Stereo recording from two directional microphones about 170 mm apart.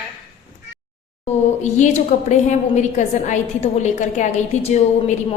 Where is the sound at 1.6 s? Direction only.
45° left (ahead or behind).